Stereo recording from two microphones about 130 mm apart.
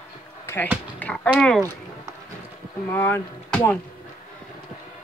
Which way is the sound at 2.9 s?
15° left (ahead or behind).